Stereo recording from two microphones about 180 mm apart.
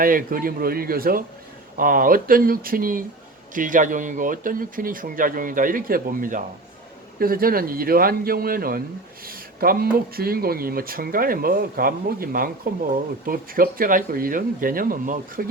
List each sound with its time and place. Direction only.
0.0 s speech: 50° right (ahead or behind)